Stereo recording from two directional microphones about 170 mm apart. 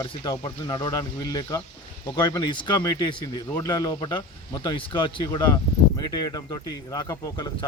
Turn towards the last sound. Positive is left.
turn(degrees=20)  # may be behind; listen again after turning